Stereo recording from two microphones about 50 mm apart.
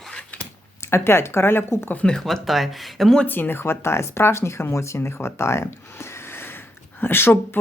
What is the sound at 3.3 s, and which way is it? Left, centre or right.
Speech, left.